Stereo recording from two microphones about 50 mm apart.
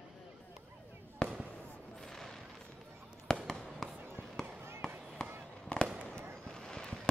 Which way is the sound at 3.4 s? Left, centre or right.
Centre.